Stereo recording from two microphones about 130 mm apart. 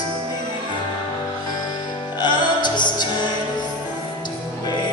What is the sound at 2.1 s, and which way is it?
Music, 35° left (ahead or behind).